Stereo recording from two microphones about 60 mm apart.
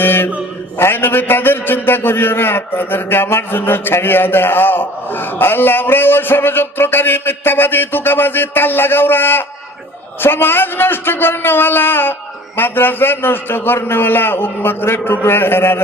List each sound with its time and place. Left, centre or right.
0.0 s mantra: left
0.8 s a man's voice: left